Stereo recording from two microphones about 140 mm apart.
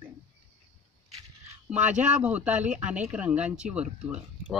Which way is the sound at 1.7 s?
10° right (ahead or behind).